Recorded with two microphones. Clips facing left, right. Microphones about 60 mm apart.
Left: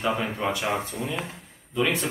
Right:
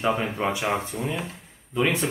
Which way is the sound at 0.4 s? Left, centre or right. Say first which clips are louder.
Right 1 dB; centre.